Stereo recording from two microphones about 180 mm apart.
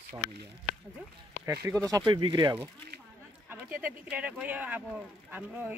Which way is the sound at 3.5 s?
10° right (ahead or behind).